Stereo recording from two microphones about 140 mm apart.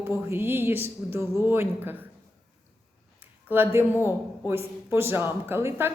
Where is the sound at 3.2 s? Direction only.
15° right (ahead or behind).